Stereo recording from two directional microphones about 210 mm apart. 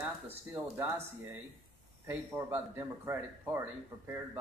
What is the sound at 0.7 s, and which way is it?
Speech, 10° right (ahead or behind).